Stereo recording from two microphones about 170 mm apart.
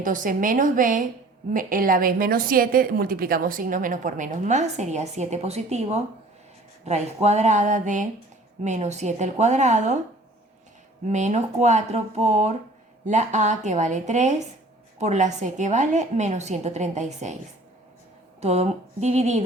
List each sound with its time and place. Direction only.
0.0 s a woman's voice: 50° right (ahead or behind)
11.0 s a woman's voice: 45° right (ahead or behind)
18.3 s speech: 40° right (ahead or behind)